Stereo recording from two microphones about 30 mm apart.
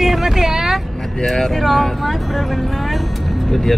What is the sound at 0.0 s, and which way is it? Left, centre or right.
Vehicle, centre.